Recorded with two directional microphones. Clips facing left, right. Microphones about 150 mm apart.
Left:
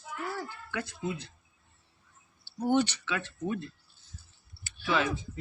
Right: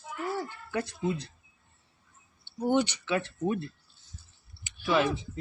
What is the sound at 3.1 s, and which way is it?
Speech, 30° right (ahead or behind).